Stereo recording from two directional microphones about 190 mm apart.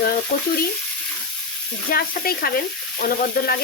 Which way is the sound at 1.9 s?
50° left (ahead or behind).